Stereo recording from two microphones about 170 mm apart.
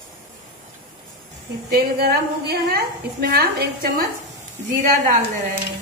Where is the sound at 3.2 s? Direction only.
65° right (ahead or behind).